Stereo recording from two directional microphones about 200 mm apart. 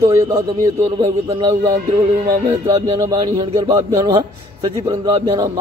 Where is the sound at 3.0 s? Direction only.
20° right (ahead or behind).